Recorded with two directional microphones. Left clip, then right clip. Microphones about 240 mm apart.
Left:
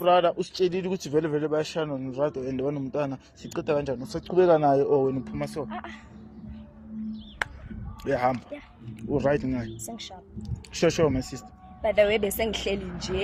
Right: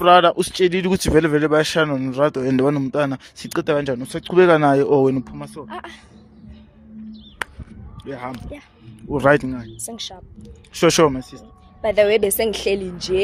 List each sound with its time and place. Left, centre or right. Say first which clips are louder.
0.0 s a woman's voice: right 9 dB; right
8.0 s speech: left 6 dB; left
9.1 s a woman's voice: right 9 dB; right